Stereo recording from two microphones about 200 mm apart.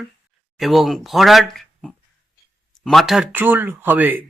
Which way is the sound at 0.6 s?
Centre (ahead or behind).